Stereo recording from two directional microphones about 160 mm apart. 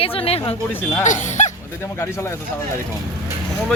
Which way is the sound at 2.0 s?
15° left (ahead or behind).